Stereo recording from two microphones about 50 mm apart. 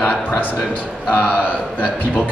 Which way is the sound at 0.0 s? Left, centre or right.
Left.